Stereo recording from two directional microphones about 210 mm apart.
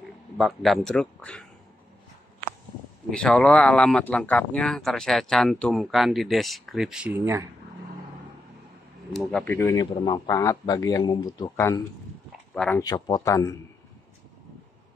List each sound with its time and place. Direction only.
0.4 s speech: centre (ahead or behind)
3.1 s speech: 5° left (ahead or behind); by 7.4 s 10° right (ahead or behind)
9.1 s speech: 5° left (ahead or behind)
12.8 s speech: 20° left (ahead or behind)